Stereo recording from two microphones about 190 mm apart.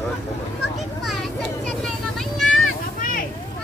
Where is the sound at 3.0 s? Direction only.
45° left (ahead or behind).